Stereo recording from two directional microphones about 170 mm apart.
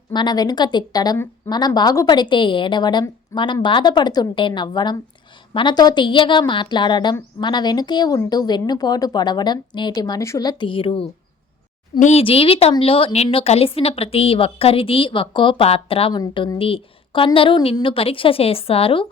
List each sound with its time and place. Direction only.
0.1 s a woman's voice: 25° left (ahead or behind)